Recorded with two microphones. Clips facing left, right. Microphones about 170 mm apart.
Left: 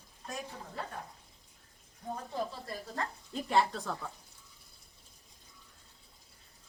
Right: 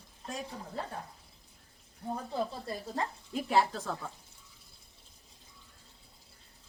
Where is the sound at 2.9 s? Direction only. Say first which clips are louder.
Right 2 dB; 10° right (ahead or behind).